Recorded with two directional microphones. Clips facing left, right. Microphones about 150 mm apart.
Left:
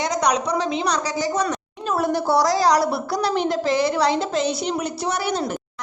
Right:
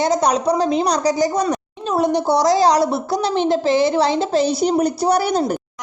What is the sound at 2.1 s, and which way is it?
A woman's voice, 20° right (ahead or behind).